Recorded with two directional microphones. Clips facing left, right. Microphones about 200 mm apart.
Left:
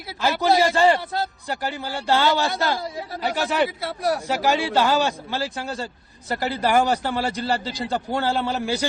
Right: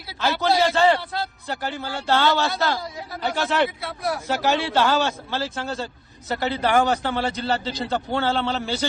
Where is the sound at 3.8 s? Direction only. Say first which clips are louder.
Left 3 dB; 35° left (ahead or behind).